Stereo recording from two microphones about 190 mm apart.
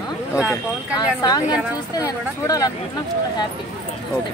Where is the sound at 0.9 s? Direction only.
20° left (ahead or behind).